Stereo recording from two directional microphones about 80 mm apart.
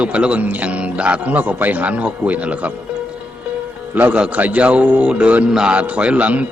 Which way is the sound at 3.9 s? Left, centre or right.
Centre.